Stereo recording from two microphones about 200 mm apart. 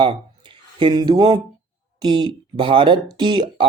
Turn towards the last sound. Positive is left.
turn(degrees=-25)  # may be behind; listen again after turning